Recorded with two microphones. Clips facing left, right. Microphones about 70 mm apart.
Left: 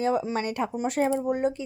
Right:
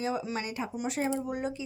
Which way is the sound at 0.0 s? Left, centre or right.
Left.